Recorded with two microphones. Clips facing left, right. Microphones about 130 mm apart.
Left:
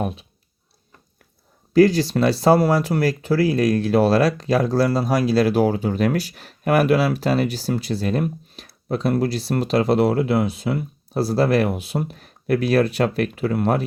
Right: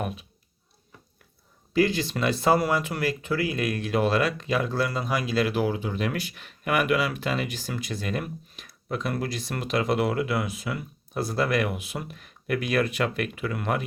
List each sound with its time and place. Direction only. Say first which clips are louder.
0.0 s speech: left 6 dB; 30° left (ahead or behind)
1.7 s speech: left 9 dB; 40° left (ahead or behind)